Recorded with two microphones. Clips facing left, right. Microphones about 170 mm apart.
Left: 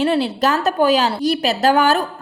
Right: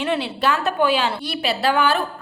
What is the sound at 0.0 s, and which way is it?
A woman's voice, 35° left (ahead or behind).